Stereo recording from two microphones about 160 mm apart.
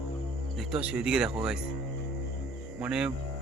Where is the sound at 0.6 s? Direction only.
5° right (ahead or behind).